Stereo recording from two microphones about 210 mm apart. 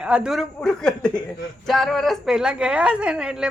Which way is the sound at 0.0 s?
5° right (ahead or behind).